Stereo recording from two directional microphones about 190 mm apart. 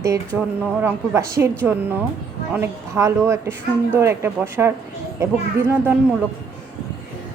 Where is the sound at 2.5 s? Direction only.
15° right (ahead or behind).